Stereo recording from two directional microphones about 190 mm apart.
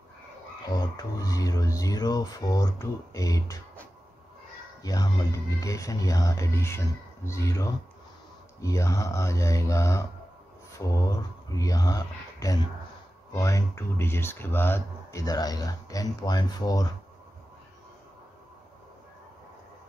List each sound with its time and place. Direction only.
0.7 s speech: 20° left (ahead or behind)
4.8 s speech: 20° left (ahead or behind)